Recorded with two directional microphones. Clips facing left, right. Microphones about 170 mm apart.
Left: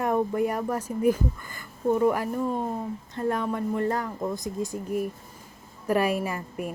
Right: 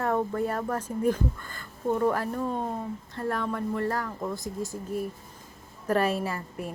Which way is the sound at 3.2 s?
20° left (ahead or behind).